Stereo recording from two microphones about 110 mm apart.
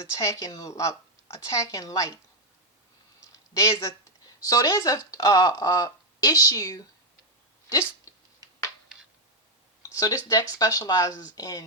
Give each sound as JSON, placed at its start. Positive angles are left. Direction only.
{"t": 0.0, "sound": "a woman's voice", "side_deg": 30}
{"t": 3.7, "sound": "a woman's voice", "side_deg": 25}
{"t": 7.7, "sound": "a sound", "side_deg": 30}
{"t": 9.9, "sound": "speech", "side_deg": 30}